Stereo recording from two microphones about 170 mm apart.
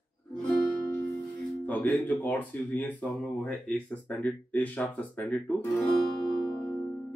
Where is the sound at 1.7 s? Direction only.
5° left (ahead or behind).